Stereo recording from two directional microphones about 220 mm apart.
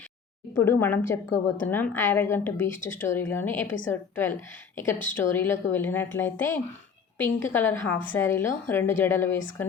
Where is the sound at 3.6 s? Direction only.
60° left (ahead or behind).